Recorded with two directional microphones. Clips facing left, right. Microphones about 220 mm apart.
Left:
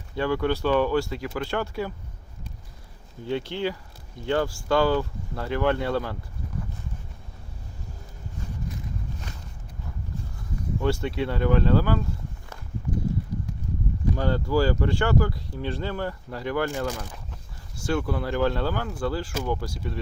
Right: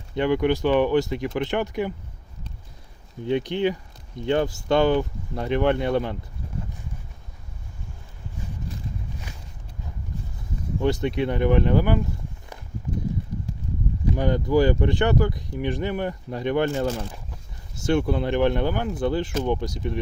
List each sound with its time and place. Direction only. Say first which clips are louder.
0.1 s speech: right 4 dB; 20° right (ahead or behind)
3.2 s speech: right 5 dB; 20° right (ahead or behind)
10.8 s speech: right 3 dB; 20° right (ahead or behind)
14.2 s speech: right 4 dB; 15° right (ahead or behind)